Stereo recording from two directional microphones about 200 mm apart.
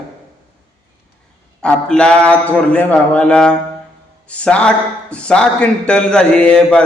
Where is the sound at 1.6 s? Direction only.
5° left (ahead or behind).